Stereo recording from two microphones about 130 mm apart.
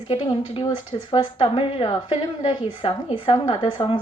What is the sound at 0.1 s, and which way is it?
Speech, 45° left (ahead or behind).